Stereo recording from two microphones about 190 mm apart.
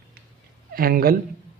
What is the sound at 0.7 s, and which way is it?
Speech, 50° right (ahead or behind).